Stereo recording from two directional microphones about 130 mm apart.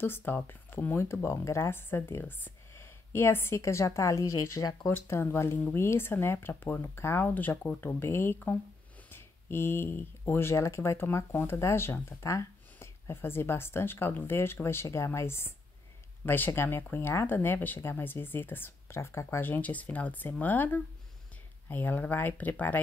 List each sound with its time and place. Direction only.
0.0 s speech: 15° left (ahead or behind)